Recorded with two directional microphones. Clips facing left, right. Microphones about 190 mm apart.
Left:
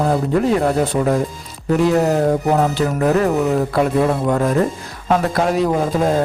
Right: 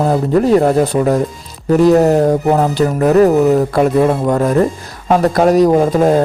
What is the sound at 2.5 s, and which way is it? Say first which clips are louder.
Speech: right 4 dB; 40° right (ahead or behind).